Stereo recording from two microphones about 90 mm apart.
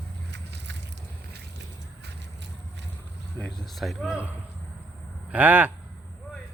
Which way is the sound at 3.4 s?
5° left (ahead or behind).